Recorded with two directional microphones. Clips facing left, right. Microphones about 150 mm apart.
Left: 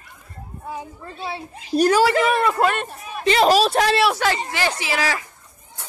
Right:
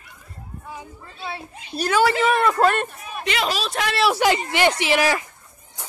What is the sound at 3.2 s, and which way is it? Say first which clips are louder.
Speech: left 9 dB; 35° left (ahead or behind).